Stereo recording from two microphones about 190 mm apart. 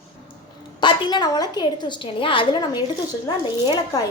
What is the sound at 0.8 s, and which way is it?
A woman's voice, 20° left (ahead or behind).